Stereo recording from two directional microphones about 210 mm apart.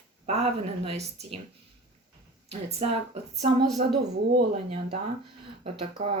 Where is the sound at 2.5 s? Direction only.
30° right (ahead or behind).